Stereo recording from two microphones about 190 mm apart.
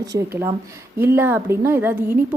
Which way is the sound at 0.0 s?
15° right (ahead or behind).